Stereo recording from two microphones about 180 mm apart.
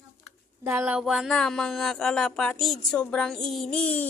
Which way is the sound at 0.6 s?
10° right (ahead or behind).